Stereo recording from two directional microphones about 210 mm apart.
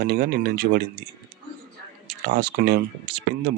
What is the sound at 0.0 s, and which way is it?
Speech, 50° right (ahead or behind).